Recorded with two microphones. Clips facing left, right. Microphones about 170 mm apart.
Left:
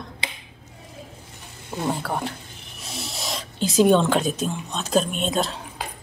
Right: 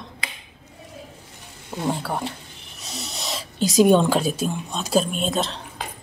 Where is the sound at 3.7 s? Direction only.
10° right (ahead or behind).